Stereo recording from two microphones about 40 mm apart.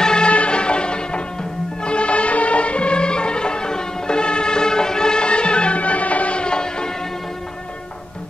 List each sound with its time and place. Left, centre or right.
0.0 s music: left